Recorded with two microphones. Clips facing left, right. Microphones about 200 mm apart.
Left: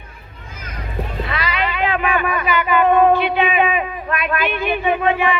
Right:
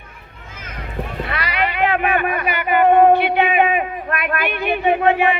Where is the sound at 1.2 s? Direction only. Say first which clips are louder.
Right 1 dB; 60° right (ahead or behind).